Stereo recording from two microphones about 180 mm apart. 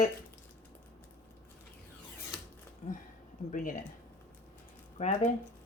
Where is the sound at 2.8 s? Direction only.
45° left (ahead or behind).